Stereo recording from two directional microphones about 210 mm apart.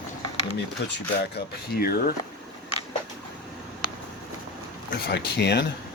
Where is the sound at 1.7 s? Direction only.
45° left (ahead or behind).